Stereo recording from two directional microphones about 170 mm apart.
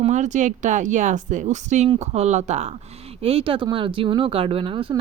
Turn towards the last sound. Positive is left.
turn(degrees=-30)  # may be behind; listen again after turning